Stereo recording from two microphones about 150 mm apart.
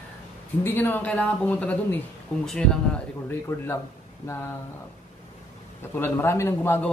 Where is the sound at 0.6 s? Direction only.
15° left (ahead or behind).